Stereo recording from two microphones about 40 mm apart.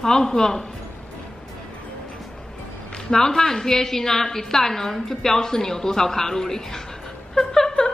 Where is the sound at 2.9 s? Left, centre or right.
Centre.